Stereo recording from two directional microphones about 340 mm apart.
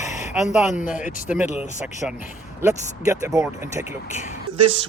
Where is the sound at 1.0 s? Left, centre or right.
Left.